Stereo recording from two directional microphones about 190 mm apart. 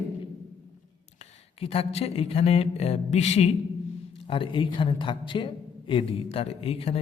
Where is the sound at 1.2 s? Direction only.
30° left (ahead or behind).